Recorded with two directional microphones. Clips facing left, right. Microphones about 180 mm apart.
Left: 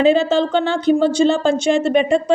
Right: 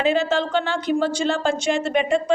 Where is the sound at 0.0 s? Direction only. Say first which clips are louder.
Left 6 dB; 25° left (ahead or behind).